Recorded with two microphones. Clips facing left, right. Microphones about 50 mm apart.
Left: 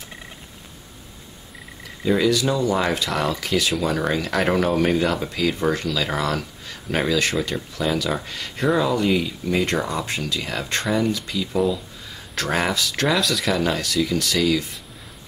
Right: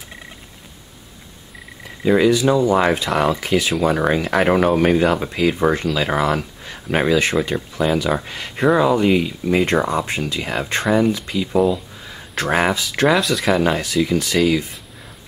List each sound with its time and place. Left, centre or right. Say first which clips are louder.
2.0 s speech: right 5 dB; right
13.0 s speech: right 5 dB; centre
13.5 s speech: right 4 dB; right